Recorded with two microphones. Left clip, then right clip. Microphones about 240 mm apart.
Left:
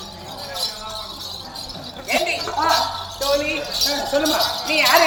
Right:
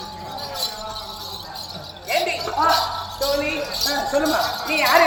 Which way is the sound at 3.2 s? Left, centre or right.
Centre.